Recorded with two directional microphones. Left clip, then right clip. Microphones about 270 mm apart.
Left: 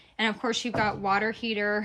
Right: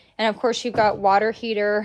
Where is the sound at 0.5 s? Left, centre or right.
Centre.